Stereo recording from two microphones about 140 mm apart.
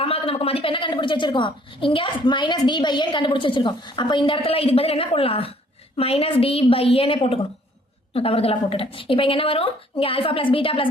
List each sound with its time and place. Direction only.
0.0 s a woman's voice: 45° left (ahead or behind)